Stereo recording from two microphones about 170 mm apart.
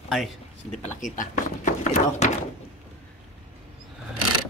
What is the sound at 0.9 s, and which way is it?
Speech, 50° left (ahead or behind).